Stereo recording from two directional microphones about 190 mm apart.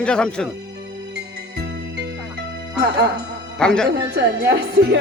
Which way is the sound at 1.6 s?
65° right (ahead or behind).